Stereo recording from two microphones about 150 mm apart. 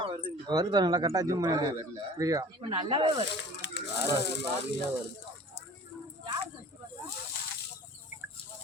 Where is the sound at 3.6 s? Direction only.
15° right (ahead or behind).